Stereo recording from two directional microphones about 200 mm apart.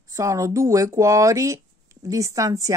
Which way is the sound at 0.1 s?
15° right (ahead or behind).